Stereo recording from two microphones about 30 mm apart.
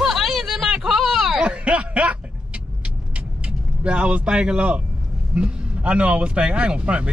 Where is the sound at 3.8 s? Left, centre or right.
Right.